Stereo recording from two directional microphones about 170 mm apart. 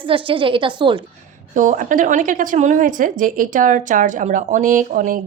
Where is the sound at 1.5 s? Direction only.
50° right (ahead or behind).